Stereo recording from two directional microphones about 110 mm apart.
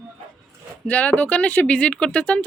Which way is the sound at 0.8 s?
15° left (ahead or behind).